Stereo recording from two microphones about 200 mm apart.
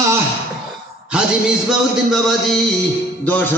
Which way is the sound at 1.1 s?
5° right (ahead or behind).